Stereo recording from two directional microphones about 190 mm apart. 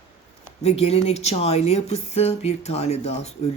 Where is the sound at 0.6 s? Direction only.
35° left (ahead or behind).